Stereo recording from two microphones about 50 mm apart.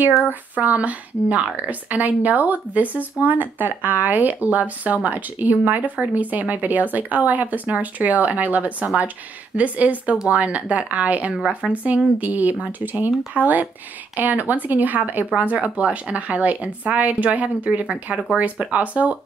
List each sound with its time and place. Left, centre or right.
0.3 s speech: right
15.5 s speech: right